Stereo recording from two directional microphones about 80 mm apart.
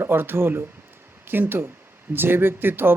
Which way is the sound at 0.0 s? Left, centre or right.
Right.